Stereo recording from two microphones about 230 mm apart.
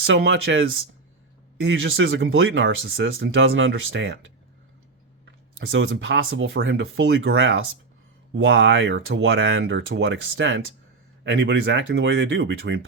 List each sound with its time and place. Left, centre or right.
0.0 s speech: right
1.6 s speech: right
5.5 s speech: right